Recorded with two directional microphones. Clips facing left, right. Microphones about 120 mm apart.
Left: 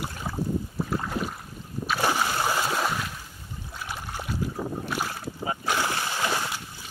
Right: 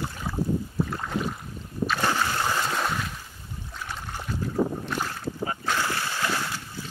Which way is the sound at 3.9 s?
10° left (ahead or behind).